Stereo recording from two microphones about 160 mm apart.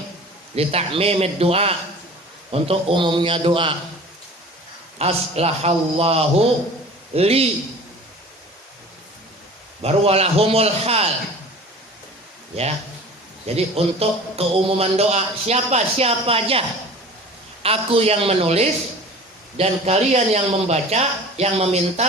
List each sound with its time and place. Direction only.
0.5 s a man's voice: 40° right (ahead or behind)
4.9 s a man's voice: 40° right (ahead or behind)
9.8 s a man's voice: 40° right (ahead or behind)
13.6 s a man's voice: 40° right (ahead or behind)